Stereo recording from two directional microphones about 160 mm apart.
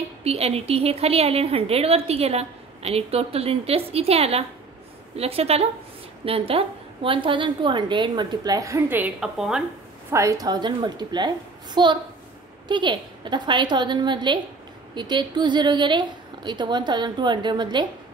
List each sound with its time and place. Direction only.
0.2 s a woman's voice: 40° right (ahead or behind); by 9.6 s 5° right (ahead or behind)
10.1 s a woman's voice: 20° right (ahead or behind)